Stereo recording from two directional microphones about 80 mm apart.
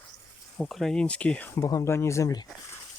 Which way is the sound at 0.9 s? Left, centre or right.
Centre.